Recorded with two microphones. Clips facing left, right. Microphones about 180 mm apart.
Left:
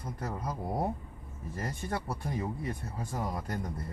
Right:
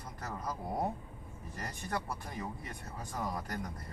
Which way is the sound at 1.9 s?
25° left (ahead or behind).